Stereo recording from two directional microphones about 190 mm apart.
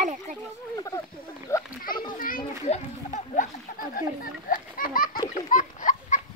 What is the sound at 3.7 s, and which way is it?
A child's voice, 50° left (ahead or behind).